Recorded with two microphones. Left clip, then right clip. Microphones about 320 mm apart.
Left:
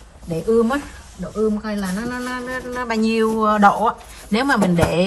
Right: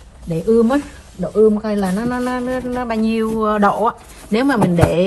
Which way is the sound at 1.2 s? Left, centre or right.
Right.